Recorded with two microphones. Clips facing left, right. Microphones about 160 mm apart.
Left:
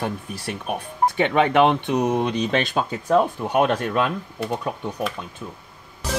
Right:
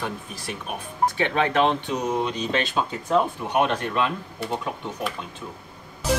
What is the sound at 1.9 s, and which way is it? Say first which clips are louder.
Mantra: left 4 dB; 60° left (ahead or behind).